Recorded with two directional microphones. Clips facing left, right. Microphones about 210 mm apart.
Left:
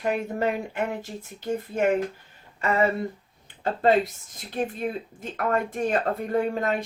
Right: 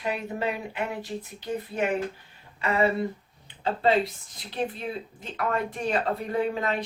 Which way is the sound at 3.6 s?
45° left (ahead or behind).